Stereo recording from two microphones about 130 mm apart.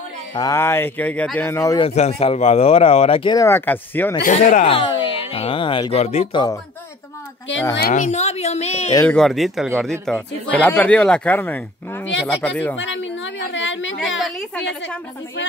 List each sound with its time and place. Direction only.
0.3 s speech: 30° left (ahead or behind)
0.6 s speech: 20° left (ahead or behind)
1.8 s speech: 55° left (ahead or behind)
3.3 s speech: 20° left (ahead or behind)
4.2 s speech: 80° left
4.6 s a sound: 45° left (ahead or behind)
6.3 s speech: 30° left (ahead or behind)
7.9 s a woman's voice: 65° left (ahead or behind)
9.0 s speech: 5° left (ahead or behind)
13.9 s speech: 5° left (ahead or behind)